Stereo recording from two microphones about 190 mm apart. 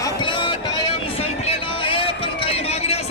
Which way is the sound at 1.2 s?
30° left (ahead or behind).